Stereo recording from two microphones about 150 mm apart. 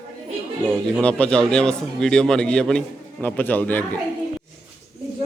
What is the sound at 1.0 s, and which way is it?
A man's voice, 10° left (ahead or behind).